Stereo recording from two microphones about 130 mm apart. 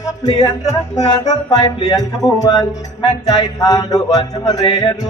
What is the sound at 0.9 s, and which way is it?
Music, 30° left (ahead or behind).